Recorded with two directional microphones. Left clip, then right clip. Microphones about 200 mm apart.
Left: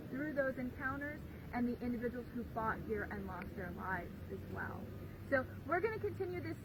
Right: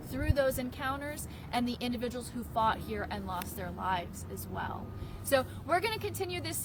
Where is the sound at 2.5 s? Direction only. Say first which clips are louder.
Right 9 dB; 30° right (ahead or behind).